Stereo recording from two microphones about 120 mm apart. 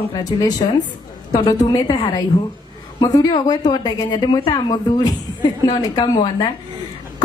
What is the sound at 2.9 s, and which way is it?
A woman's voice, 35° left (ahead or behind).